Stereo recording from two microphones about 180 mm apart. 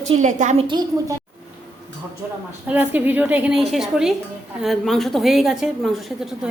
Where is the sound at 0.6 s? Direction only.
25° right (ahead or behind).